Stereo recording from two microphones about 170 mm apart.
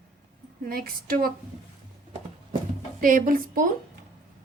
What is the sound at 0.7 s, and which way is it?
Speech, 60° right (ahead or behind).